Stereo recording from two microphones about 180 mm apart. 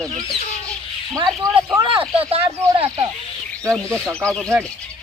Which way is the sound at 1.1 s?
20° right (ahead or behind).